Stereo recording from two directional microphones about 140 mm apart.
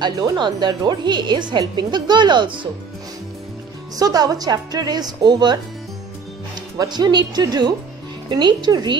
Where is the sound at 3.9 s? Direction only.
25° right (ahead or behind).